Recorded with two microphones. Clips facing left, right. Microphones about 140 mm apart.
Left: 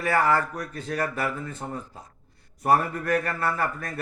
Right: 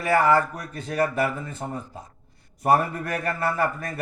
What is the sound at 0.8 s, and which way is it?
Speech, 25° right (ahead or behind).